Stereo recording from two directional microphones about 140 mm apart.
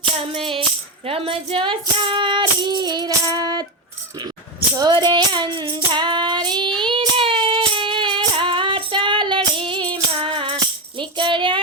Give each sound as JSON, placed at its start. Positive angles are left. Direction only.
{"t": 0.2, "sound": "music", "side_deg": -40}
{"t": 4.7, "sound": "music", "side_deg": -30}
{"t": 10.9, "sound": "tambourine", "side_deg": -35}